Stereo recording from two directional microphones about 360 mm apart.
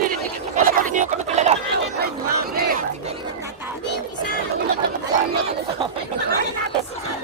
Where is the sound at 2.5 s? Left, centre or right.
Right.